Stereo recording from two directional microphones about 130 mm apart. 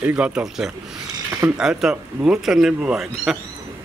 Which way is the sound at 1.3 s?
20° right (ahead or behind).